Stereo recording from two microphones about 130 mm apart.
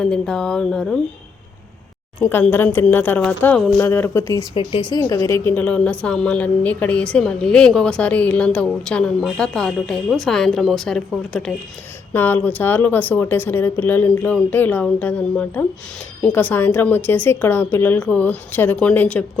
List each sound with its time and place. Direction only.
0.0 s speech: 5° left (ahead or behind)
2.2 s a woman's voice: 15° left (ahead or behind)
3.8 s speech: 20° left (ahead or behind)
4.5 s speech: 40° left (ahead or behind)
4.9 s a woman's voice: 25° left (ahead or behind); by 11.5 s 5° left (ahead or behind)
12.1 s a woman's voice: 15° left (ahead or behind)